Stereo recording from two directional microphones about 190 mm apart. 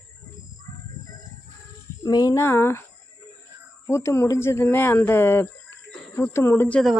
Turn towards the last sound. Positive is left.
turn(degrees=5)  # may be behind; listen again after turning